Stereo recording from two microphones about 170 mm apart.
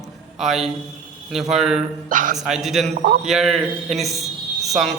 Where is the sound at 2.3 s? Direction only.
Centre (ahead or behind).